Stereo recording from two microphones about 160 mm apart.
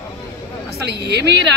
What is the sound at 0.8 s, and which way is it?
Speech, 90° right.